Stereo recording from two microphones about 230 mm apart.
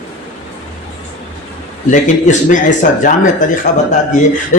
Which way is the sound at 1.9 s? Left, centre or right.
Left.